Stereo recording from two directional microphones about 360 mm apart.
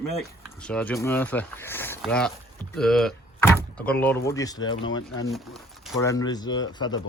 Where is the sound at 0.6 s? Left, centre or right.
Centre.